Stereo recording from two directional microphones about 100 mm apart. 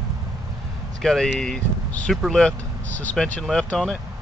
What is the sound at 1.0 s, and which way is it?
Speech, 5° left (ahead or behind).